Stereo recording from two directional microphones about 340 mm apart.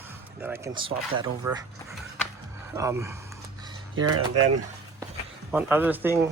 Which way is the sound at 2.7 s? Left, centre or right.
Centre.